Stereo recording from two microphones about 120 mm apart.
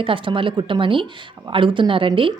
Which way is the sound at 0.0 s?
45° right (ahead or behind).